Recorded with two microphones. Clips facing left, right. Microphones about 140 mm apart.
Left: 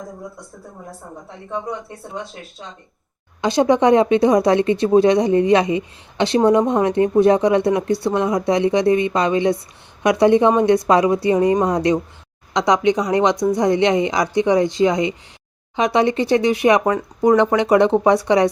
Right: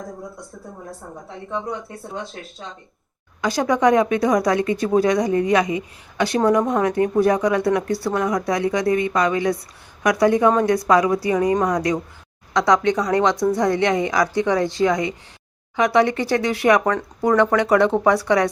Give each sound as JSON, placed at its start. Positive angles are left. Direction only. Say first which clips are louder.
{"t": 3.4, "sound": "speech", "louder": "left 3 dB", "side_deg": 25}